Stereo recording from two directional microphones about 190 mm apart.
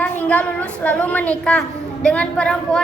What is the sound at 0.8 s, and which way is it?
A woman's voice, 10° left (ahead or behind).